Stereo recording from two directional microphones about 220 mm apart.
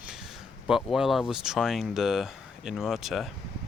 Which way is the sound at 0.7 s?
Centre (ahead or behind).